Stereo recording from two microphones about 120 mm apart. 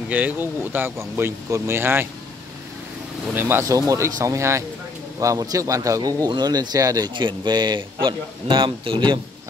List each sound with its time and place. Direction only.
0.1 s speech: 15° right (ahead or behind)
3.3 s speech: 20° right (ahead or behind); by 9.2 s 45° right (ahead or behind)